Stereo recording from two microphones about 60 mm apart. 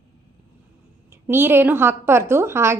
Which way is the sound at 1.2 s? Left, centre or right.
Right.